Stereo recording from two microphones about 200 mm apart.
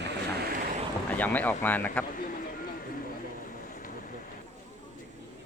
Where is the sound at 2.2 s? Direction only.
45° left (ahead or behind).